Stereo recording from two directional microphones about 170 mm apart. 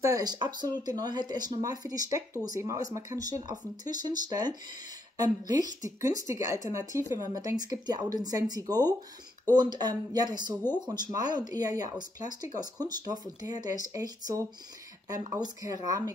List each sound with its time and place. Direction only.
0.0 s speech: 20° right (ahead or behind)